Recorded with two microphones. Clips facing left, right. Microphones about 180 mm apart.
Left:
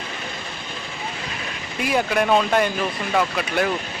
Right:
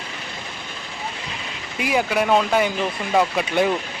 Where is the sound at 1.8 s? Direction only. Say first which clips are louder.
Even; 10° right (ahead or behind).